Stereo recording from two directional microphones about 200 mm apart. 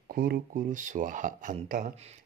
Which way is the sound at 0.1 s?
50° right (ahead or behind).